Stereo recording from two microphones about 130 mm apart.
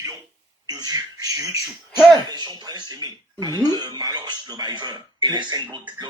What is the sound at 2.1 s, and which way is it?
Speech, 30° right (ahead or behind).